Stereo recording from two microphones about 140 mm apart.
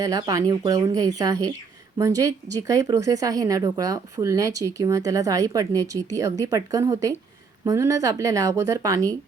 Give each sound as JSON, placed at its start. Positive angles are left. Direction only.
{"t": 0.0, "sound": "speech", "side_deg": -25}